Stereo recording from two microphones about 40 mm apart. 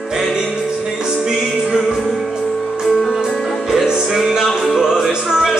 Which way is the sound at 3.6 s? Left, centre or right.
Centre.